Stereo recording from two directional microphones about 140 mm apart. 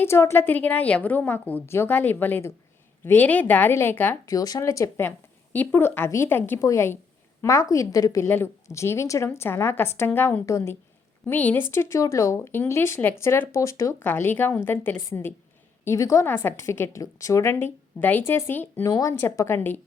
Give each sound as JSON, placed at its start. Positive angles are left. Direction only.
{"t": 0.0, "sound": "a woman's voice", "side_deg": 20}
{"t": 4.3, "sound": "a woman's voice", "side_deg": 25}